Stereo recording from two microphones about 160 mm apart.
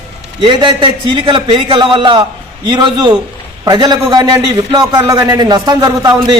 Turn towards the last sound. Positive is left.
turn(degrees=-25)  # may be behind; listen again after turning